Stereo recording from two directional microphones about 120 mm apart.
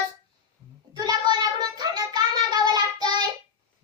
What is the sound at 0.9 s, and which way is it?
Child singing, 35° right (ahead or behind).